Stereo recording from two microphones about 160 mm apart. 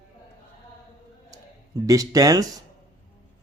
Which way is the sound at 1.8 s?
20° right (ahead or behind).